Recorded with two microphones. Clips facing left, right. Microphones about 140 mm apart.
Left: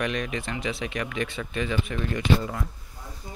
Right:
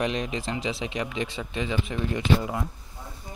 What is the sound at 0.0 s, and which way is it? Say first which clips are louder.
A man's voice: right 1 dB; 25° right (ahead or behind).